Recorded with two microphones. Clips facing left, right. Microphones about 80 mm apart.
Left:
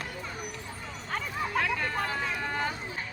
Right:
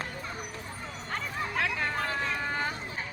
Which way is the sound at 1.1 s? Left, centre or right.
Centre.